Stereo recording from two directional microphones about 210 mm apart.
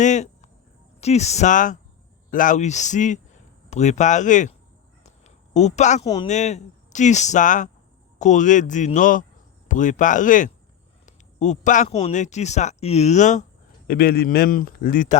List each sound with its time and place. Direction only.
0.0 s a sound: 35° left (ahead or behind)
1.0 s speech: 30° left (ahead or behind)
5.0 s a sound: 35° left (ahead or behind)
6.0 s a man's voice: 20° left (ahead or behind)
6.2 s speech: 35° left (ahead or behind)
13.8 s speech: 45° left (ahead or behind)